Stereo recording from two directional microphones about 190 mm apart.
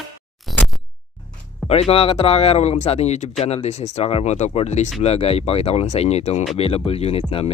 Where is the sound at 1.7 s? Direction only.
30° left (ahead or behind).